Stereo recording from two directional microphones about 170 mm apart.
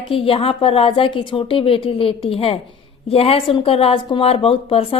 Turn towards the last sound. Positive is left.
turn(degrees=35)  # may be behind; listen again after turning